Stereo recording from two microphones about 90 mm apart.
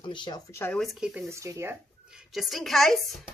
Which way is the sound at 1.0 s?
10° right (ahead or behind).